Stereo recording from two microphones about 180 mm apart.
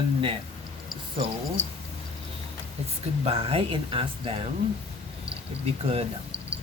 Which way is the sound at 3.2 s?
35° right (ahead or behind).